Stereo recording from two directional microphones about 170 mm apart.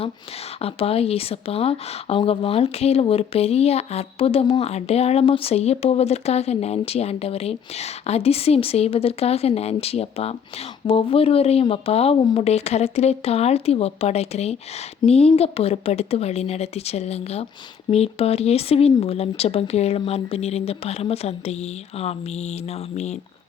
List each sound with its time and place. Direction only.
0.6 s speech: 35° left (ahead or behind)